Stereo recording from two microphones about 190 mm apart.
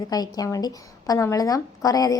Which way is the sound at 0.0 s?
20° left (ahead or behind).